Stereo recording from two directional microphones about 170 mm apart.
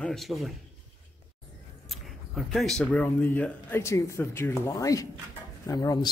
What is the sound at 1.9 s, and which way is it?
Speech, centre (ahead or behind).